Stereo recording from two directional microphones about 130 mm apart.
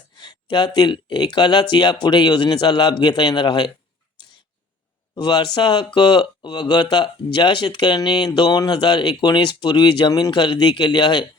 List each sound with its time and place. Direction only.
0.2 s speech: 35° left (ahead or behind)
5.1 s speech: 35° left (ahead or behind)